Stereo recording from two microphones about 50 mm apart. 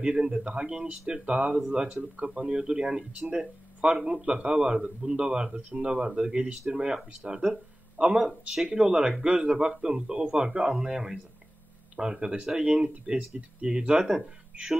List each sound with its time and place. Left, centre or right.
0.0 s speech: centre